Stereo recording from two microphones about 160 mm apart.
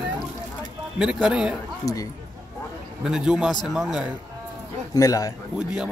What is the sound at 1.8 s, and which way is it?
Speech, 20° left (ahead or behind).